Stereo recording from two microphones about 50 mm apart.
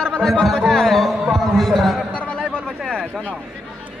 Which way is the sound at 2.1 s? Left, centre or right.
Left.